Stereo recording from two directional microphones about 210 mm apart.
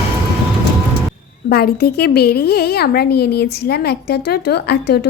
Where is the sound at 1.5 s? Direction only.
45° left (ahead or behind).